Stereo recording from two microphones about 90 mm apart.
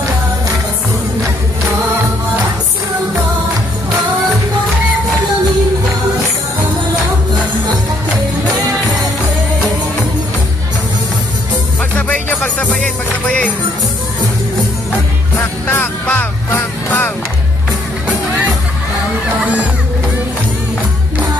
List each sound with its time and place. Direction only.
12.1 s music: 15° left (ahead or behind)
14.9 s music: 20° left (ahead or behind)
19.4 s music: 15° right (ahead or behind)